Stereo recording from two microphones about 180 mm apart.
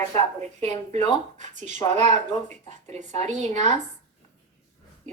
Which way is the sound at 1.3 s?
40° right (ahead or behind).